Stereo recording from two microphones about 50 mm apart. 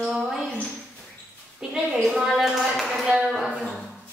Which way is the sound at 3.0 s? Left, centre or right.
Centre.